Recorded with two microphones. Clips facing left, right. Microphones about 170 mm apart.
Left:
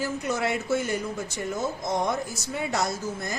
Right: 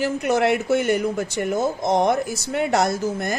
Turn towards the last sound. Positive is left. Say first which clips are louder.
# right 7 dB
turn(degrees=-75)  # may be behind; listen again after turning